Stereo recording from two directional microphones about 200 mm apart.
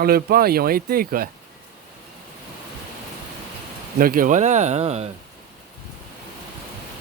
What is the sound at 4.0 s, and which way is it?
Speech, 45° right (ahead or behind).